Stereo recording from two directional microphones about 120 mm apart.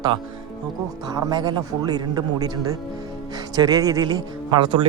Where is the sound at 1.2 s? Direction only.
30° right (ahead or behind).